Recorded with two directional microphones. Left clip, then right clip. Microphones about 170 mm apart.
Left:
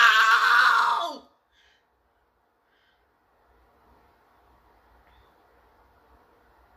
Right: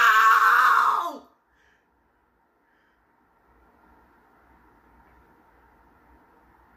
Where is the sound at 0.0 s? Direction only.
10° left (ahead or behind).